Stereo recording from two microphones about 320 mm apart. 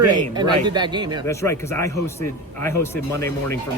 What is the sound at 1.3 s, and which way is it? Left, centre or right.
Speech, centre.